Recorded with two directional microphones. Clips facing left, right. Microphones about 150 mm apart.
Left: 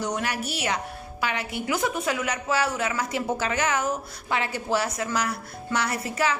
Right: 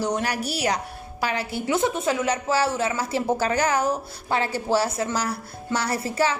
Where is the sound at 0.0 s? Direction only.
35° right (ahead or behind).